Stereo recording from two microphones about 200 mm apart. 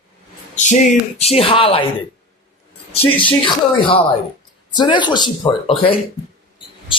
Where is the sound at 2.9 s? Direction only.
25° left (ahead or behind).